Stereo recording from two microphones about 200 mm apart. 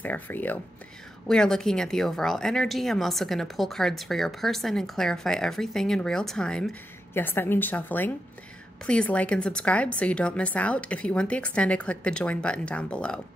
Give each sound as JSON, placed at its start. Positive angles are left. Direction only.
{"t": 0.0, "sound": "a woman's voice", "side_deg": 10}